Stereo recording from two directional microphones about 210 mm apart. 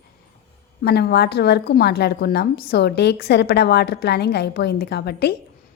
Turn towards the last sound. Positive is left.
turn(degrees=50)  # may be behind; listen again after turning